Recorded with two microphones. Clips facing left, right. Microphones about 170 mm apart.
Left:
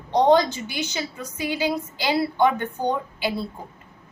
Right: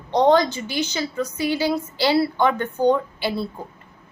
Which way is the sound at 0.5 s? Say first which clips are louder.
Right 4 dB; 15° left (ahead or behind).